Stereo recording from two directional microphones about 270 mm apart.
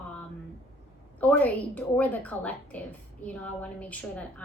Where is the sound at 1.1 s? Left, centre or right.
Centre.